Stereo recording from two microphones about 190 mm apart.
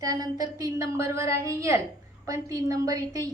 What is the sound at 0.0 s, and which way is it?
A woman's voice, 20° right (ahead or behind).